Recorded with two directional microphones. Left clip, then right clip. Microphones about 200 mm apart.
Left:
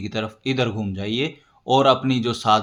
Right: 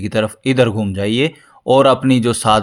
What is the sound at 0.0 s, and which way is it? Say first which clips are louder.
A man's voice: right 9 dB; 40° right (ahead or behind).